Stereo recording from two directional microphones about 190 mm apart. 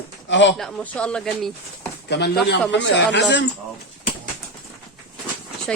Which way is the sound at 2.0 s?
60° left (ahead or behind).